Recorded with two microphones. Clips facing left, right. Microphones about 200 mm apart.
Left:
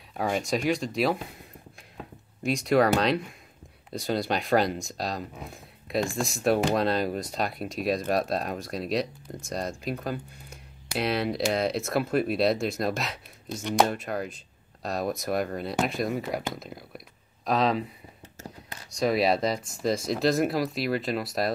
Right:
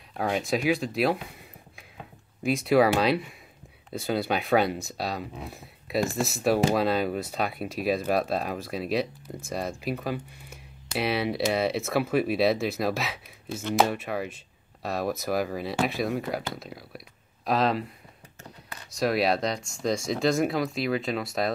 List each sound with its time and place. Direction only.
0.1 s speech: centre (ahead or behind)
2.4 s speech: centre (ahead or behind)
3.9 s speech: centre (ahead or behind)
18.9 s speech: centre (ahead or behind)